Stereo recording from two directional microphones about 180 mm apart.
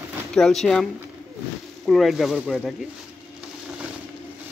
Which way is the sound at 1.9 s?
Centre (ahead or behind).